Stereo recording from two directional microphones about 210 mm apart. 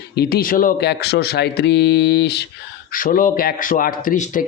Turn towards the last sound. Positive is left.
turn(degrees=40)  # may be behind; listen again after turning